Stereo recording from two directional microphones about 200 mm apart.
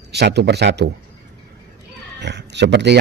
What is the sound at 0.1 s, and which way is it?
Speech, 55° right (ahead or behind).